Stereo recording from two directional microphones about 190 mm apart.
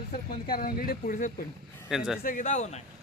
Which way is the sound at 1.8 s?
Centre (ahead or behind).